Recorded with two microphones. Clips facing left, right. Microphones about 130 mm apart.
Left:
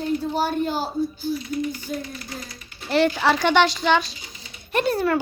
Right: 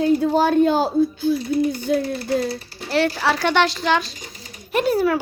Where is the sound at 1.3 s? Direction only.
35° right (ahead or behind).